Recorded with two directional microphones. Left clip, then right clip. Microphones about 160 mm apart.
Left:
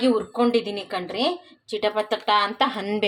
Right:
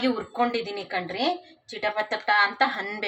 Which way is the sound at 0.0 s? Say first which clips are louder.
Left 4 dB; 30° left (ahead or behind).